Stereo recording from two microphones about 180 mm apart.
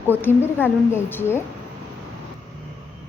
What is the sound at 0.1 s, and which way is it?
A woman's voice, 10° left (ahead or behind).